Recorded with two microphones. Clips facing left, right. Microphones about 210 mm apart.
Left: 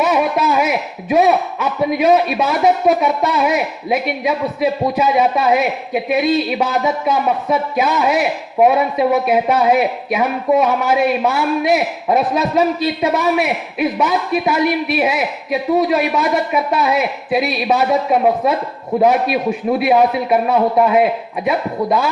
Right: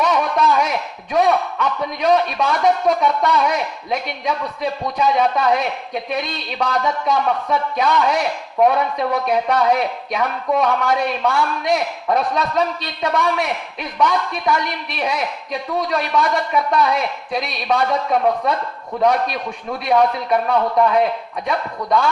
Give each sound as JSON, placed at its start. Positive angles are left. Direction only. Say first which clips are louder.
{"t": 0.0, "sound": "a sound", "louder": "left 3 dB", "side_deg": 5}
{"t": 0.3, "sound": "a man's voice", "louder": "left 2 dB", "side_deg": 5}
{"t": 20.6, "sound": "a man's voice", "louder": "left 3 dB", "side_deg": 20}
{"t": 20.8, "sound": "a man's voice", "louder": "left 3 dB", "side_deg": 5}